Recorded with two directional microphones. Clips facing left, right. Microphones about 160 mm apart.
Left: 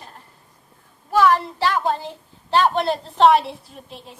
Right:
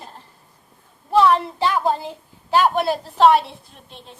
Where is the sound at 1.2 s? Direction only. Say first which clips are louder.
Right 1 dB; 25° right (ahead or behind).